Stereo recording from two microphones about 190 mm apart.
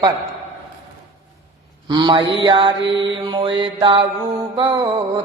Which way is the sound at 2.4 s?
25° right (ahead or behind).